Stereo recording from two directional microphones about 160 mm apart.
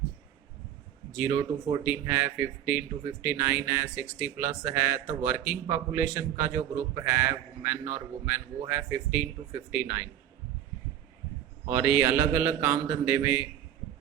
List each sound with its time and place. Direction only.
1.1 s speech: 15° right (ahead or behind)
11.7 s speech: 15° right (ahead or behind)